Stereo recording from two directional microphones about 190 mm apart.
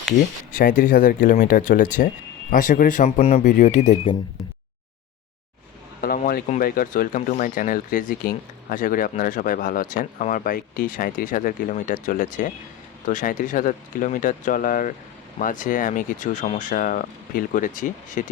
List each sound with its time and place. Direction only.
0.5 s speech: 45° left (ahead or behind)
6.0 s speech: 50° left (ahead or behind)